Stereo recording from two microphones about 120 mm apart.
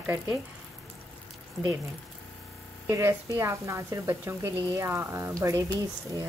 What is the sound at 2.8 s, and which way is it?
Speech, 25° right (ahead or behind).